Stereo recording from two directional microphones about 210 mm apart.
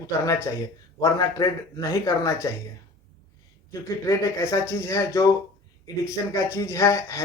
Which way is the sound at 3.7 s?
15° left (ahead or behind).